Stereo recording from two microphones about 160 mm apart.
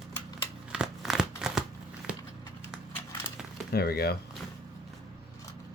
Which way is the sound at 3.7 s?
75° left (ahead or behind).